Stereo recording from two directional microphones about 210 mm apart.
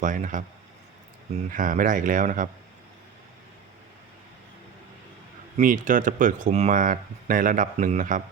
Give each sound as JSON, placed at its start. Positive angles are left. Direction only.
{"t": 0.0, "sound": "speech", "side_deg": -40}
{"t": 1.5, "sound": "speech", "side_deg": -40}
{"t": 5.5, "sound": "speech", "side_deg": -40}